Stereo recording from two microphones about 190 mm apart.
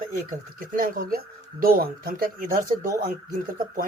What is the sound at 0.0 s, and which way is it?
Speech, 50° right (ahead or behind).